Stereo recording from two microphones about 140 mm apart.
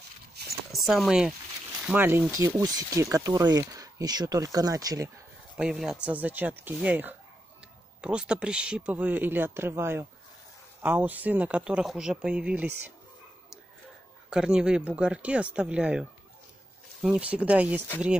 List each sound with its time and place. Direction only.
0.7 s speech: centre (ahead or behind)
1.9 s speech: 15° right (ahead or behind)
5.6 s speech: 5° right (ahead or behind)
14.3 s speech: 5° right (ahead or behind)